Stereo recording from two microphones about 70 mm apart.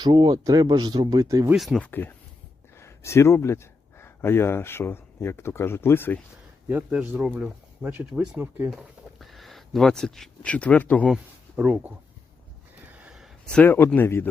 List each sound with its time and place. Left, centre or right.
0.0 s speech: right
1.5 s speech: centre
1.8 s speech: left
2.7 s speech: left
6.7 s speech: right
8.7 s speech: centre; by 11.1 s left
11.5 s speech: right
13.7 s speech: left